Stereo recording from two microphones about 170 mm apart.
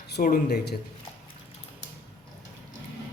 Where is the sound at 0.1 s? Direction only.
55° left (ahead or behind).